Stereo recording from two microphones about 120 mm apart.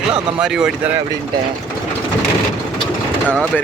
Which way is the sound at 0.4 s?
5° right (ahead or behind).